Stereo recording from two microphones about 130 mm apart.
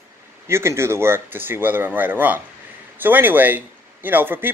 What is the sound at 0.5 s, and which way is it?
Speech, 20° right (ahead or behind).